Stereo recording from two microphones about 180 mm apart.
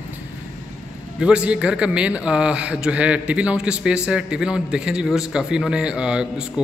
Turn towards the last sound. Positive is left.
turn(degrees=-5)  # may be behind; listen again after turning